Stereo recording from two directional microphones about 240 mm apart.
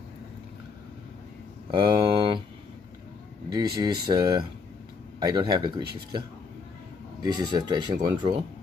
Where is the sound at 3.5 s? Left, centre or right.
Centre.